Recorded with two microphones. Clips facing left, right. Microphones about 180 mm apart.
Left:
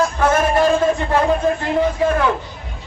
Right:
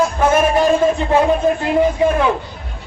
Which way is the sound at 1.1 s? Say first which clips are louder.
Right 4 dB; 15° right (ahead or behind).